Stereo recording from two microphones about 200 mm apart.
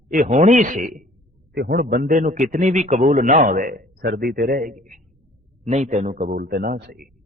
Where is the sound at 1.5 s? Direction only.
55° right (ahead or behind).